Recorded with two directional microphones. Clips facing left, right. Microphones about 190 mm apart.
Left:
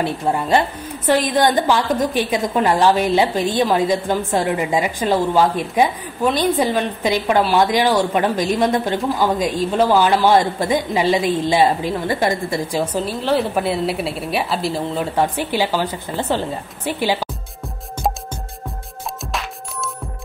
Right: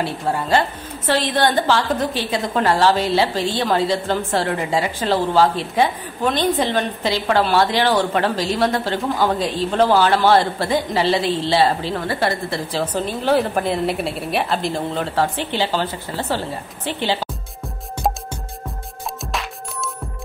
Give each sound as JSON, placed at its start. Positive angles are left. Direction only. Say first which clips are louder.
{"t": 0.0, "sound": "a woman's voice", "louder": "left 2 dB", "side_deg": 20}